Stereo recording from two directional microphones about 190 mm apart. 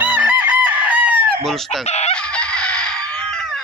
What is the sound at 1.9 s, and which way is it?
Chicken, 35° left (ahead or behind).